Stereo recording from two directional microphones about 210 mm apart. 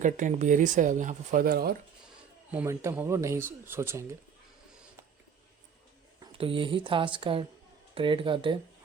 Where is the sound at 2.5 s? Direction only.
10° right (ahead or behind).